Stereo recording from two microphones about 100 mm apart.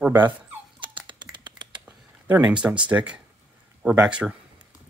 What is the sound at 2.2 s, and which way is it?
Speech, 15° right (ahead or behind).